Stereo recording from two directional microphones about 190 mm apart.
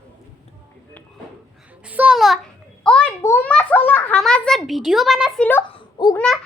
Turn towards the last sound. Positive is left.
turn(degrees=20)  # may be behind; listen again after turning